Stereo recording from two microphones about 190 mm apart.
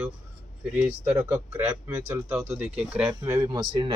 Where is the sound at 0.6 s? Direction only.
5° right (ahead or behind).